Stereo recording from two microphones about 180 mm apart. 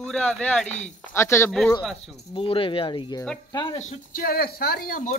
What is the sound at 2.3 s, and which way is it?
Speech, 30° left (ahead or behind).